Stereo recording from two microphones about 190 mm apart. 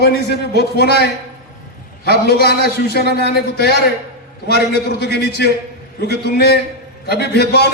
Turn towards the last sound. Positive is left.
turn(degrees=55)  # may be behind; listen again after turning